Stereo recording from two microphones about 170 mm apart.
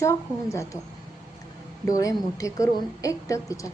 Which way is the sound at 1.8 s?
20° left (ahead or behind).